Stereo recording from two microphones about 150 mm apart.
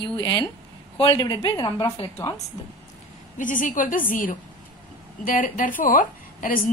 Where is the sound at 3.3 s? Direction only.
60° left (ahead or behind).